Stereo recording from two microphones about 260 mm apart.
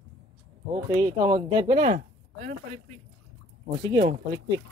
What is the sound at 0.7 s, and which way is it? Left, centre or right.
Speech, centre.